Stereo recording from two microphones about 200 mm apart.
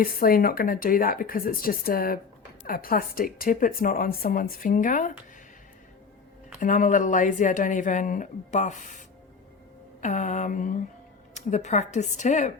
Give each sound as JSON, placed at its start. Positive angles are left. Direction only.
{"t": 0.0, "sound": "speech", "side_deg": 45}
{"t": 6.6, "sound": "speech", "side_deg": 40}